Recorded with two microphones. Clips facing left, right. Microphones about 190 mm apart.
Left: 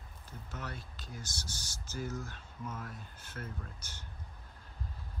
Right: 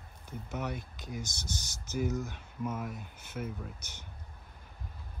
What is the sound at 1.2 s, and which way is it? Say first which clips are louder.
Speech: right 5 dB; 10° left (ahead or behind).